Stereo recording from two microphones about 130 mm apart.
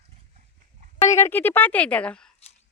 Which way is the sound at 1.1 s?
20° left (ahead or behind).